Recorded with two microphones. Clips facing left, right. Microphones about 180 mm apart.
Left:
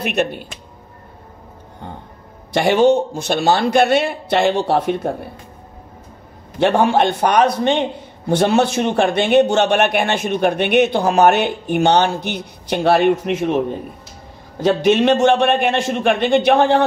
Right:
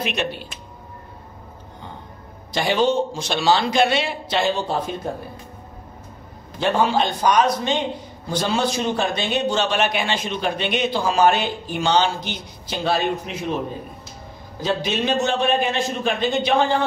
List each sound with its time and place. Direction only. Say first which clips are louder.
0.0 s speech: left 5 dB; 55° left (ahead or behind)
2.5 s a man's voice: left 6 dB; 60° left (ahead or behind)
6.6 s a man's voice: left 5 dB; 65° left (ahead or behind)
14.6 s a man's voice: left 9 dB; 70° left (ahead or behind)